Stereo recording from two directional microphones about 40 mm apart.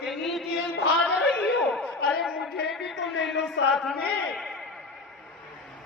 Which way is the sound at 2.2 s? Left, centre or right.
Centre.